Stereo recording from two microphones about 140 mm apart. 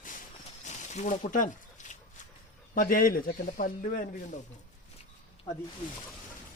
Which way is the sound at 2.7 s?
80° left.